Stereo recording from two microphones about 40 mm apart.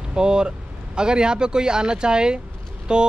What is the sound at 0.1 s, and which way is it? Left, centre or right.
Speech, right.